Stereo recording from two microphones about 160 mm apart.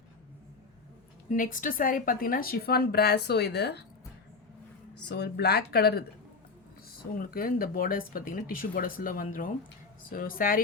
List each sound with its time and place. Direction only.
1.3 s a woman's voice: 55° left (ahead or behind); by 3.8 s 90° left
5.0 s speech: 90° left
7.2 s speech: 65° left (ahead or behind)